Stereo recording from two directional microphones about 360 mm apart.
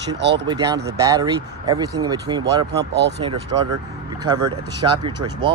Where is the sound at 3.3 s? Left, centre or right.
Right.